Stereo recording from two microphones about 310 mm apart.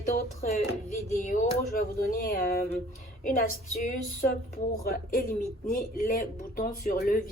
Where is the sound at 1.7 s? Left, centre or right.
Left.